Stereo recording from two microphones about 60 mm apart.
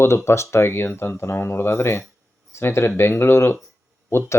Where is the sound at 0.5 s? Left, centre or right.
Left.